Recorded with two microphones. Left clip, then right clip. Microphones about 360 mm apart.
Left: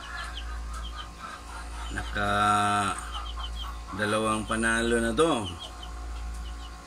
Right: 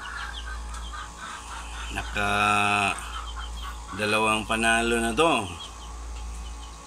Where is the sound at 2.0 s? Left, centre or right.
Centre.